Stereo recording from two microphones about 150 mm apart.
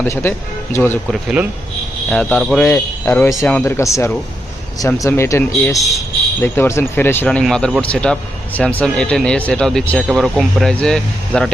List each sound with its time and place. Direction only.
0.0 s speech: 15° left (ahead or behind)
1.1 s speech: 5° right (ahead or behind)
2.6 s speech: 15° left (ahead or behind)